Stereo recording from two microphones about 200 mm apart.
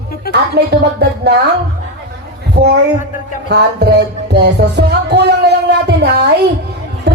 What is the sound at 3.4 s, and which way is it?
Music, 55° right (ahead or behind).